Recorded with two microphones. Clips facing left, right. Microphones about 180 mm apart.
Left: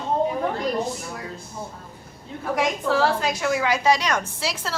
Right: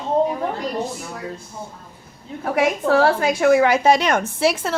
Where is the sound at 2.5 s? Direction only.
60° right (ahead or behind).